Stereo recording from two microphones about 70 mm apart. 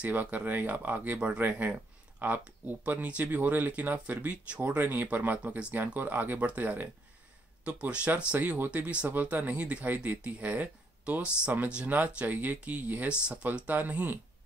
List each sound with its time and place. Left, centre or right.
0.0 s speech: right
13.5 s speech: right